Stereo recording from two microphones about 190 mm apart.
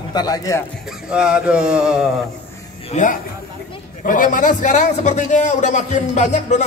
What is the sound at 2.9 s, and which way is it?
A man's voice, 45° left (ahead or behind).